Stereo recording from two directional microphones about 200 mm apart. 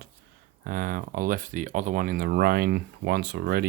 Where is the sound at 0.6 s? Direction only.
45° right (ahead or behind).